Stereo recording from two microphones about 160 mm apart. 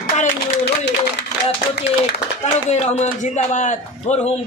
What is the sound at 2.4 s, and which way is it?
A man's voice, 45° left (ahead or behind).